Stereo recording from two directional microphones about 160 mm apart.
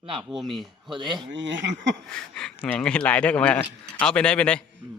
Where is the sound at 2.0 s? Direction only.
5° left (ahead or behind).